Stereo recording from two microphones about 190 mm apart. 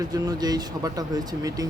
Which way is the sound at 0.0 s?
20° right (ahead or behind).